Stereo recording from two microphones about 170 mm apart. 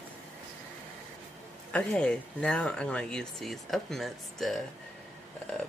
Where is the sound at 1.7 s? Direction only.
5° left (ahead or behind).